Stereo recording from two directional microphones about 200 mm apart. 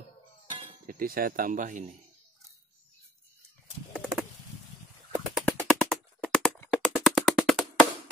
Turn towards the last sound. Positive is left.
turn(degrees=0)  # may be behind; listen again after turning